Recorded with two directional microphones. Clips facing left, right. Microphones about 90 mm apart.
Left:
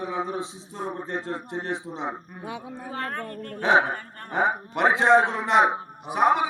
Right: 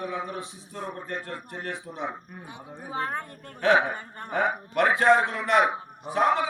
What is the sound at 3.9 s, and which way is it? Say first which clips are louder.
Speech: left 1 dB; 15° right (ahead or behind).